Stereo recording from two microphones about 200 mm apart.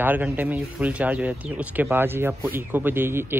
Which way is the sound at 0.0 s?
10° right (ahead or behind).